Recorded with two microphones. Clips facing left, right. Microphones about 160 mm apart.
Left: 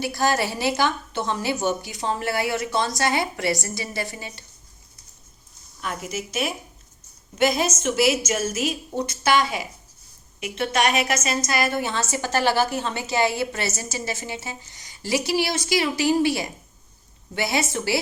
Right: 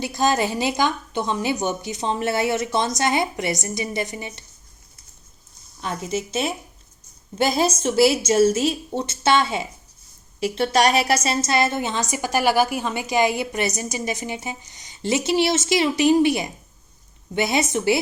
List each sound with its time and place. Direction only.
0.0 s a woman's voice: 20° right (ahead or behind)
5.8 s a woman's voice: 30° right (ahead or behind)